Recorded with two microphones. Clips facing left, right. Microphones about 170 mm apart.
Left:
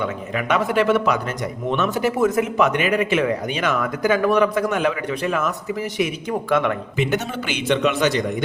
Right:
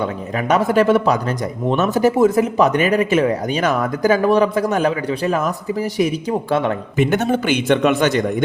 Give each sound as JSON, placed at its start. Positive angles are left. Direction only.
{"t": 0.0, "sound": "speech", "side_deg": -40}
{"t": 2.1, "sound": "speech", "side_deg": -30}
{"t": 6.9, "sound": "a man's voice", "side_deg": -50}